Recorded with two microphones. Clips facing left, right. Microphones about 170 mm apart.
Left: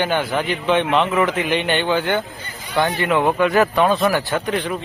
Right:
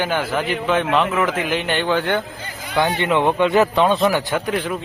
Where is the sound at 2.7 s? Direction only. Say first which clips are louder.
Even; 15° right (ahead or behind).